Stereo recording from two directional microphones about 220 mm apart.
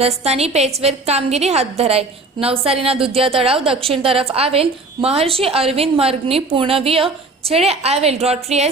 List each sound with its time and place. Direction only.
0.0 s a woman's voice: 30° right (ahead or behind)